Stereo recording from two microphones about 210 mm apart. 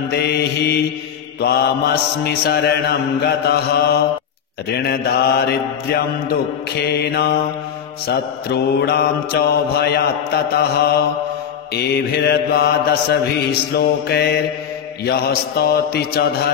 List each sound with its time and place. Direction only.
0.1 s mantra: 50° left (ahead or behind)